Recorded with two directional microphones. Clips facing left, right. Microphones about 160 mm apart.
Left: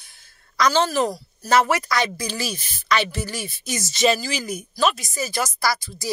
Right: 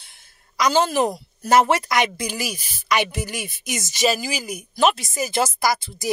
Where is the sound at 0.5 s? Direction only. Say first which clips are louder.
Right 1 dB; 15° right (ahead or behind).